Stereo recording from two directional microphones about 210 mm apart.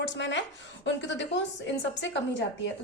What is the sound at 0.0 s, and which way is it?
A woman's voice, 55° left (ahead or behind).